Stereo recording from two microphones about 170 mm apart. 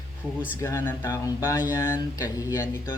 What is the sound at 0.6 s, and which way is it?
Speech, 15° left (ahead or behind).